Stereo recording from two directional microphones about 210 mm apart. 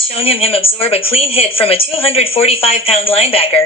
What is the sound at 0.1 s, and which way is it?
A woman's voice, 25° left (ahead or behind).